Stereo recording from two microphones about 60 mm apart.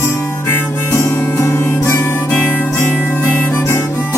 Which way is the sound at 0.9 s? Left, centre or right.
Left.